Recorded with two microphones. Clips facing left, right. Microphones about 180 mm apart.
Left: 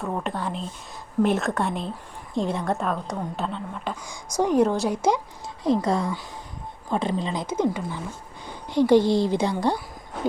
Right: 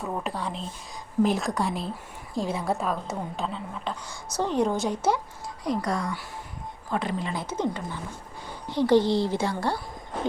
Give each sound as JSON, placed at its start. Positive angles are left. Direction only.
{"t": 0.0, "sound": "a woman's voice", "side_deg": 0}
{"t": 4.0, "sound": "a woman's voice", "side_deg": 10}
{"t": 5.6, "sound": "speech", "side_deg": 25}
{"t": 7.4, "sound": "a woman's voice", "side_deg": 10}